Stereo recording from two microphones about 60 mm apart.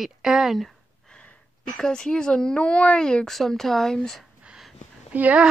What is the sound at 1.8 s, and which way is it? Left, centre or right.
Speech, centre.